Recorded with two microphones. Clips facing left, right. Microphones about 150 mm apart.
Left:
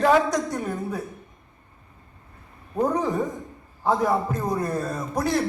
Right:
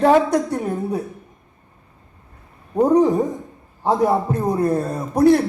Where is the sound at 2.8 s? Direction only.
35° right (ahead or behind).